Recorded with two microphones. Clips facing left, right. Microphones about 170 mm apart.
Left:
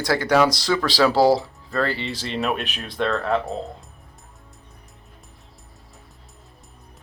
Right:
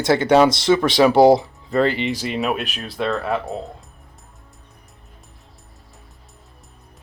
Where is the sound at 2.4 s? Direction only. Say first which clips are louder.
Right 2 dB; centre (ahead or behind).